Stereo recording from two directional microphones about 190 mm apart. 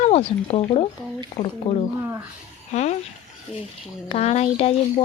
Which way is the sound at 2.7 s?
35° left (ahead or behind).